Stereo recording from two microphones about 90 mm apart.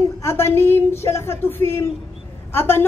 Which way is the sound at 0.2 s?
30° left (ahead or behind).